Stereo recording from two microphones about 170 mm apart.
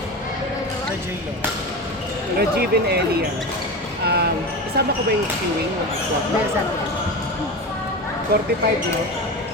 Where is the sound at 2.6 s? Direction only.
65° right (ahead or behind).